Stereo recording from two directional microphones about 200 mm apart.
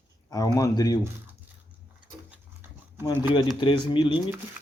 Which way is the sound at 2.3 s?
10° right (ahead or behind).